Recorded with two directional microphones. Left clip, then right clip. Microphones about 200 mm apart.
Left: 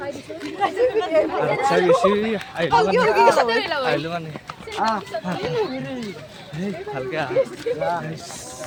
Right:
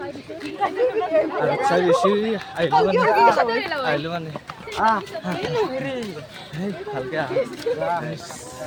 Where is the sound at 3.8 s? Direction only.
5° right (ahead or behind).